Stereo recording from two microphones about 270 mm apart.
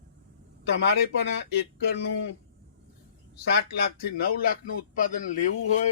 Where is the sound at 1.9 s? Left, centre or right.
Left.